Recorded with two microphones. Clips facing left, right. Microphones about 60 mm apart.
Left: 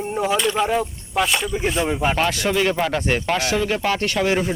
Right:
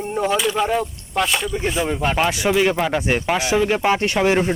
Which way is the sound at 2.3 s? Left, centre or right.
Centre.